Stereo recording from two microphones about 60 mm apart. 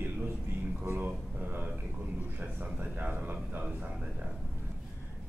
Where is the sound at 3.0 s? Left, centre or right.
Right.